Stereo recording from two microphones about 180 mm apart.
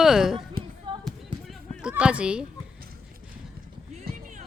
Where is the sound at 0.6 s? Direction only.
55° right (ahead or behind).